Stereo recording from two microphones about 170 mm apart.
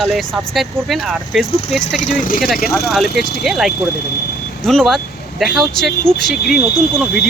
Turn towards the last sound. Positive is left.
turn(degrees=0)  # may be behind; listen again after turning